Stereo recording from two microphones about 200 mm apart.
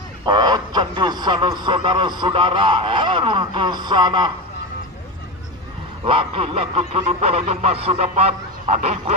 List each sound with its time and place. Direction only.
0.2 s speech: 20° right (ahead or behind)
6.0 s speech: 25° right (ahead or behind)